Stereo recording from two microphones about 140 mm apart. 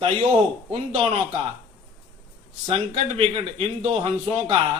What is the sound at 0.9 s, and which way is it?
Speech, 40° right (ahead or behind).